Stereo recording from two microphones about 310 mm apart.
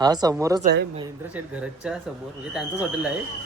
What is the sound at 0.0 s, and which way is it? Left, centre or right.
Speech, centre.